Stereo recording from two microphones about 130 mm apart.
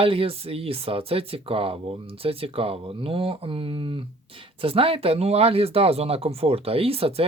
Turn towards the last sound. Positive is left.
turn(degrees=-50)  # may be behind; listen again after turning